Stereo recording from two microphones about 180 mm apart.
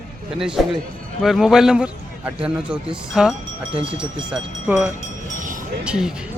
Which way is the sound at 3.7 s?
30° right (ahead or behind).